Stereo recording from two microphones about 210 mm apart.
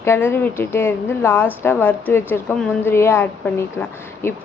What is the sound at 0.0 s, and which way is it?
A woman's voice, 10° left (ahead or behind).